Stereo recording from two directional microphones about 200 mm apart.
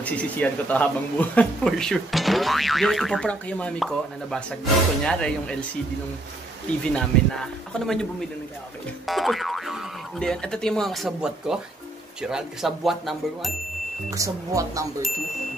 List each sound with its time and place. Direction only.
0.0 s speech: 5° left (ahead or behind)
6.8 s speech: 5° left (ahead or behind)
14.1 s speech: 15° right (ahead or behind)